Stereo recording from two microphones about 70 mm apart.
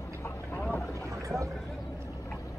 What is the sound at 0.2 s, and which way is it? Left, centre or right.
Vehicle, left.